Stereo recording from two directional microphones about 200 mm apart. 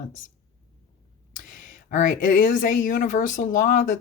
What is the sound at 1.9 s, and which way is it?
Speech, 40° left (ahead or behind).